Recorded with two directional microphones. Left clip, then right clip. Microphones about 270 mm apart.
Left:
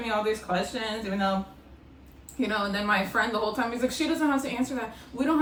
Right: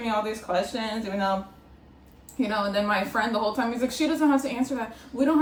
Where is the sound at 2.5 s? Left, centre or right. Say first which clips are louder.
Right 1 dB; centre.